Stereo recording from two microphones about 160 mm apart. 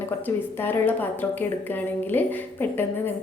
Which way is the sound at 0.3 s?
10° left (ahead or behind).